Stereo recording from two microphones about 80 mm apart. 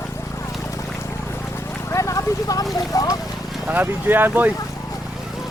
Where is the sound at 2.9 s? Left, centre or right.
Left.